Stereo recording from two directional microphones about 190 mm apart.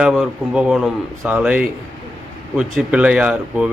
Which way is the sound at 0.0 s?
5° right (ahead or behind).